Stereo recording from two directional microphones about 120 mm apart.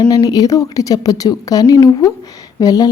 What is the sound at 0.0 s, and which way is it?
A woman's voice, 35° left (ahead or behind).